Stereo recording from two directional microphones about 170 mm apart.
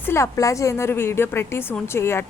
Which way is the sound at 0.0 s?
15° left (ahead or behind).